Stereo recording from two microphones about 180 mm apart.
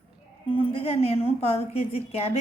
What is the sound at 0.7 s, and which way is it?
A woman's voice, 30° left (ahead or behind).